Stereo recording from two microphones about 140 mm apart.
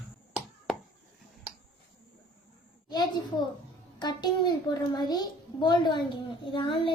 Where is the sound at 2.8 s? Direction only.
30° left (ahead or behind).